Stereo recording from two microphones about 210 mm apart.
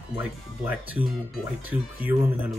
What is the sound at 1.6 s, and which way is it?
Speech, 10° right (ahead or behind).